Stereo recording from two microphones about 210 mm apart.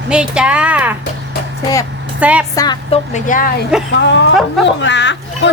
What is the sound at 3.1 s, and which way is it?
Speech, 40° left (ahead or behind).